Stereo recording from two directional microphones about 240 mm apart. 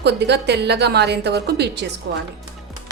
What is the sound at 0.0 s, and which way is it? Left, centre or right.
Speech, right.